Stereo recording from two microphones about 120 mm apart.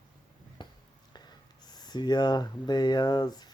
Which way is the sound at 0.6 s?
40° left (ahead or behind).